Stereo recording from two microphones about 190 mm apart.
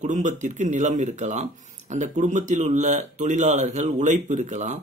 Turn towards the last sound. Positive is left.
turn(degrees=-40)  # may be behind; listen again after turning